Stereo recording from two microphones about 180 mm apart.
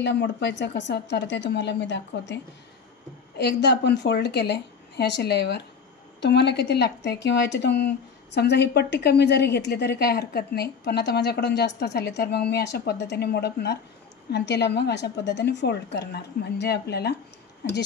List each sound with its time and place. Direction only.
0.0 s speech: 70° left (ahead or behind)